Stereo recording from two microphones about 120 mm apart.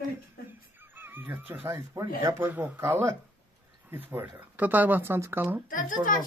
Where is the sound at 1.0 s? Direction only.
15° right (ahead or behind).